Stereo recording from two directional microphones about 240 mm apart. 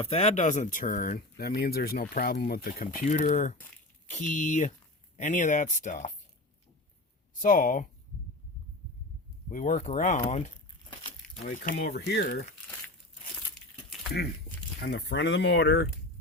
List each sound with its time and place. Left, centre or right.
0.0 s speech: left
7.3 s speech: left
9.5 s speech: left
11.4 s speech: left
11.7 s speech: left
14.8 s speech: left